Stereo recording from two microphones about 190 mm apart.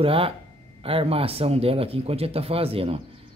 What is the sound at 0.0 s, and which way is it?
Speech, 30° right (ahead or behind).